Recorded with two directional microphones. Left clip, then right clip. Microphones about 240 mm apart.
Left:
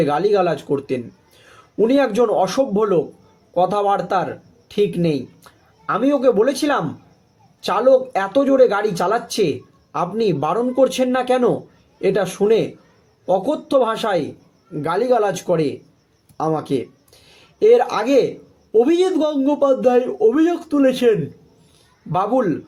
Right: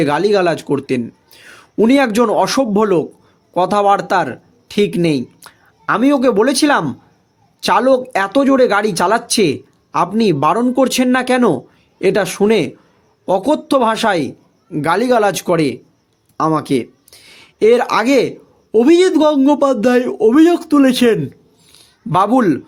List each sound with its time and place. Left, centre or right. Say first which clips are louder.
0.0 s speech: right 3 dB; right